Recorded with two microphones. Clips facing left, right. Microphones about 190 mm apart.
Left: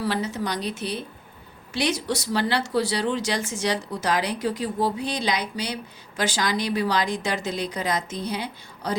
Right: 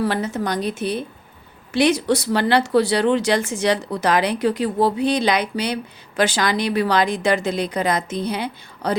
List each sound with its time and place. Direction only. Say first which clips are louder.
0.0 s a woman's voice: right 4 dB; 50° right (ahead or behind)